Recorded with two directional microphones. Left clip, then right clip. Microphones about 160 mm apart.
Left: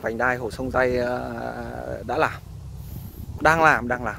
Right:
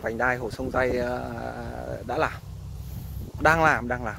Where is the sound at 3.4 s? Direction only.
30° left (ahead or behind).